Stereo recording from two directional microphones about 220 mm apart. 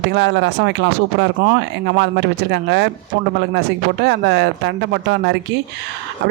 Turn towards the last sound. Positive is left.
turn(degrees=-50)  # may be behind; listen again after turning